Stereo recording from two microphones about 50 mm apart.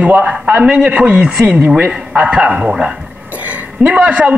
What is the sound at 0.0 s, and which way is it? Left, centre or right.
A man's voice, right.